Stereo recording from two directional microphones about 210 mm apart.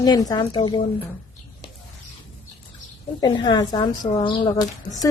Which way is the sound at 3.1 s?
20° left (ahead or behind).